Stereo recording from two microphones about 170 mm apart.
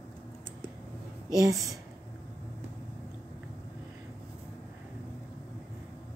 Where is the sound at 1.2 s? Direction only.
20° right (ahead or behind).